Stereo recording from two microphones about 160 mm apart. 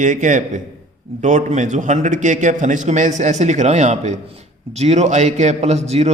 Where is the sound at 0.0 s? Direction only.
50° right (ahead or behind).